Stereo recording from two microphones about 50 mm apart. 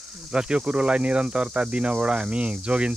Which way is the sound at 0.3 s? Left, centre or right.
Centre.